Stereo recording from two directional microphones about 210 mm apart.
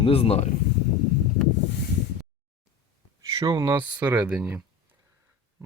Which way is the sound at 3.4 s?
20° right (ahead or behind).